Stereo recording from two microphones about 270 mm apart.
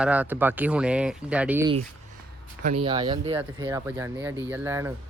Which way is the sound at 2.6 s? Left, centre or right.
Right.